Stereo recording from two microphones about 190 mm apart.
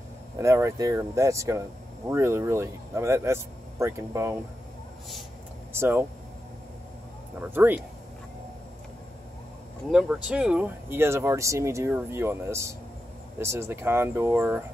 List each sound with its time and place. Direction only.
0.4 s speech: 15° right (ahead or behind)
5.7 s speech: 10° right (ahead or behind)
7.5 s speech: 10° right (ahead or behind)
9.8 s speech: 5° right (ahead or behind)